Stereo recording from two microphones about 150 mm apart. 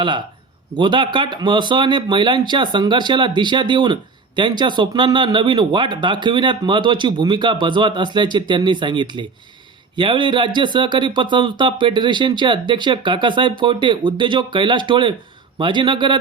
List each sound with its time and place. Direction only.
0.8 s speech: 30° right (ahead or behind)